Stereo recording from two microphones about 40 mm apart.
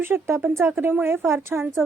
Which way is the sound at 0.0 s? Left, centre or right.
Right.